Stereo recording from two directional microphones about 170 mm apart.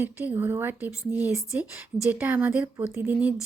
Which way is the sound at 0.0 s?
10° right (ahead or behind).